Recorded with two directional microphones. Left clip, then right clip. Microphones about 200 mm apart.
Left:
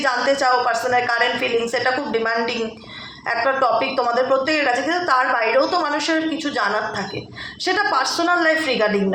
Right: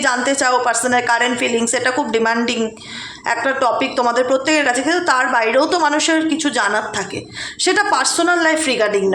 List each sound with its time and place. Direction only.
0.0 s a woman's voice: 40° right (ahead or behind)